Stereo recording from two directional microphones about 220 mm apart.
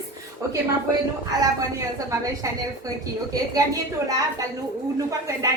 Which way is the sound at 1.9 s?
15° right (ahead or behind).